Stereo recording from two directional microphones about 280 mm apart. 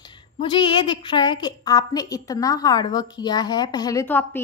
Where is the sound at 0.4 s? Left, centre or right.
Centre.